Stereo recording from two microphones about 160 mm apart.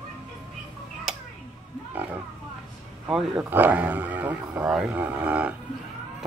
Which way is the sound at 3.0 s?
5° right (ahead or behind).